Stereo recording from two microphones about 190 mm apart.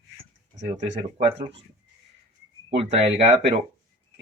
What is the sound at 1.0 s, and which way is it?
Speech, 30° right (ahead or behind).